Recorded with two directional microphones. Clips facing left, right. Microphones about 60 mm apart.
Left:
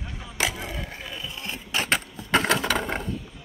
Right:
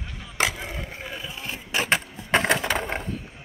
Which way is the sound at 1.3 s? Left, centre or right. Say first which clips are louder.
Right 1 dB; centre.